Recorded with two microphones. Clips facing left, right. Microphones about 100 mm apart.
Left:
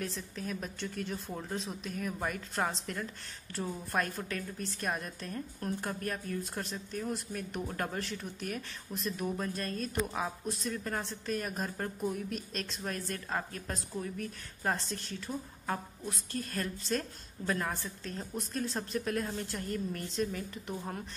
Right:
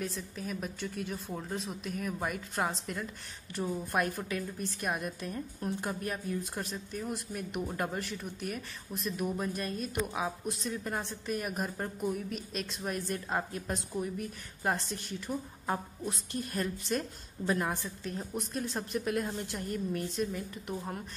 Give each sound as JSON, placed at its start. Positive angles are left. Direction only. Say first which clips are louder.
{"t": 0.0, "sound": "a woman's voice", "louder": "right 1 dB", "side_deg": -5}
{"t": 12.6, "sound": "a woman's voice", "louder": "right 2 dB", "side_deg": -15}